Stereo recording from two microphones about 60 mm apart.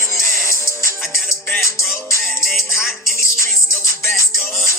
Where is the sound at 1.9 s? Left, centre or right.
Left.